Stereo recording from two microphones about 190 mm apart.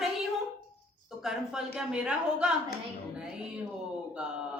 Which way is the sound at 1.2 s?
5° right (ahead or behind).